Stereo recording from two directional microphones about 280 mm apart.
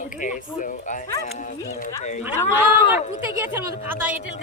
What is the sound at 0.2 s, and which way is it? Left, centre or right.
Speech, left.